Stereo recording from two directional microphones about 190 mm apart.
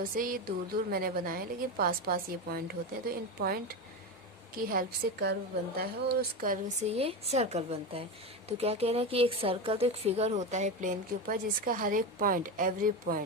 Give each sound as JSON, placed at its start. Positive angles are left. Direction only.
{"t": 0.0, "sound": "a woman's voice", "side_deg": -50}
{"t": 6.8, "sound": "speech", "side_deg": -35}